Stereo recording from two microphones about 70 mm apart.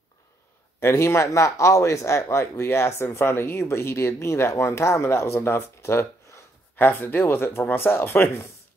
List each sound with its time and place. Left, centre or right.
0.7 s speech: left